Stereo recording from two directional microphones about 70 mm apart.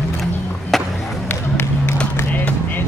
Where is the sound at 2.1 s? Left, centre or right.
Left.